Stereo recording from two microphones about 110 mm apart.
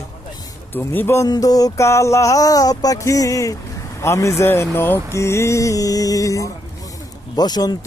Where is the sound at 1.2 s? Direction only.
35° left (ahead or behind).